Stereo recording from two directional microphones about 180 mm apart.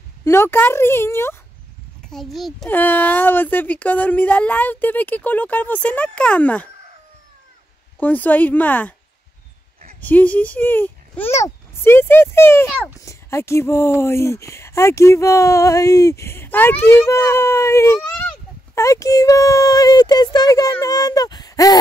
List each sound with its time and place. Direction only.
0.2 s speech: 15° left (ahead or behind)
2.0 s speech: centre (ahead or behind)
8.0 s speech: 10° left (ahead or behind)
9.9 s speech: 10° left (ahead or behind)